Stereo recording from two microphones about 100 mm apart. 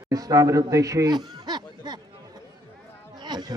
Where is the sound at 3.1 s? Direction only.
45° right (ahead or behind).